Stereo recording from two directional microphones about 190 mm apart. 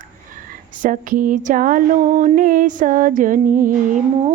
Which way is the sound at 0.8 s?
45° right (ahead or behind).